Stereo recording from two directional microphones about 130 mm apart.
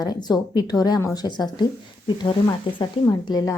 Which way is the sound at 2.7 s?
40° left (ahead or behind).